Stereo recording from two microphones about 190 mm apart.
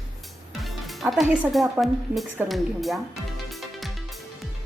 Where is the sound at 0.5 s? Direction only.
Centre (ahead or behind).